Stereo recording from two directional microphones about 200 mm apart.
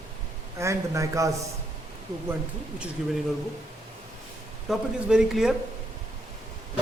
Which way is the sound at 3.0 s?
Centre (ahead or behind).